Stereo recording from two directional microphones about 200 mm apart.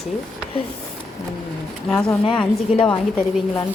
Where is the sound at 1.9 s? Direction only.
5° left (ahead or behind).